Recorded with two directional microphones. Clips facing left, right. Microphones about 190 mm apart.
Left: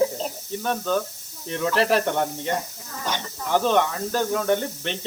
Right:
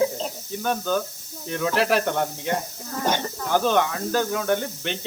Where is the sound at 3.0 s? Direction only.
45° right (ahead or behind).